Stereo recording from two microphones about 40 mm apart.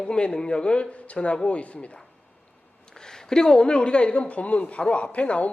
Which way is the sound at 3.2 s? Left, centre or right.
Centre.